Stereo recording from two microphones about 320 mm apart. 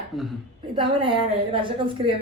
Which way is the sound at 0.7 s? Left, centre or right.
Centre.